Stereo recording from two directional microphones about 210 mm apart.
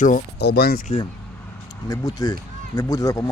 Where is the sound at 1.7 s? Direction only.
15° left (ahead or behind).